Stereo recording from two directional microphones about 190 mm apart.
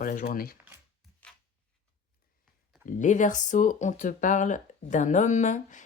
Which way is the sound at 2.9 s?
40° left (ahead or behind).